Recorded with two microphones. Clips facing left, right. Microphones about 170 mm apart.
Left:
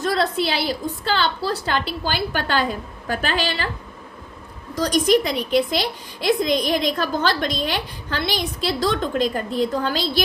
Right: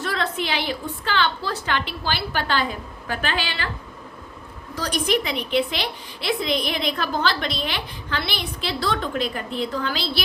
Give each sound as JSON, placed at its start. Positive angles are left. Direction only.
{"t": 0.0, "sound": "a woman's voice", "side_deg": 40}
{"t": 4.8, "sound": "a woman's voice", "side_deg": 40}